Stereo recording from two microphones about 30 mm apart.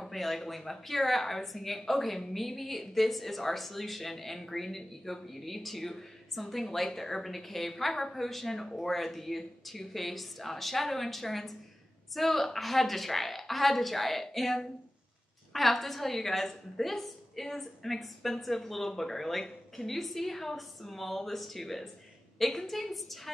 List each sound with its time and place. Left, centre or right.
0.0 s a woman's voice: centre